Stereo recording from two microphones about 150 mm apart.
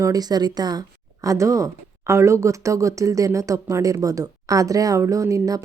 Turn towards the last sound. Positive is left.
turn(degrees=-20)  # may be behind; listen again after turning